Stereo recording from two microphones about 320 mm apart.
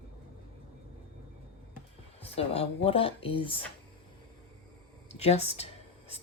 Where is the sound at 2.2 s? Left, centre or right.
Centre.